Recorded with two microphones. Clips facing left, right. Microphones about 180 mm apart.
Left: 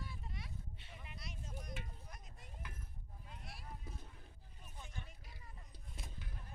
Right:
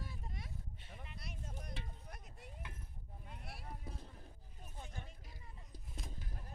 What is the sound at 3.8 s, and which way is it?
Music, 35° right (ahead or behind).